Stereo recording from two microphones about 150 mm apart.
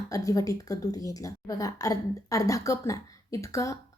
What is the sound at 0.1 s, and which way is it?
A woman's voice, 25° left (ahead or behind).